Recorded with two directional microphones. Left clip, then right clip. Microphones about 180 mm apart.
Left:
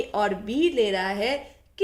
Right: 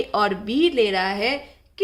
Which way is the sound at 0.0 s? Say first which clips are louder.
Right 4 dB; 30° right (ahead or behind).